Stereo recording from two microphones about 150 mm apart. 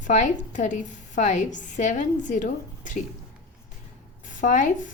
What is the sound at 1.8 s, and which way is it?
A woman's voice, 55° left (ahead or behind).